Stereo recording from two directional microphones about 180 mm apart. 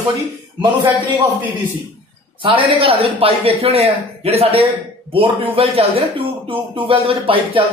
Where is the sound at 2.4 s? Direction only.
30° right (ahead or behind).